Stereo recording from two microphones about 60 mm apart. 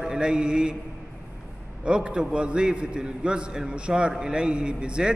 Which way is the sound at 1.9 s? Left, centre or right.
Centre.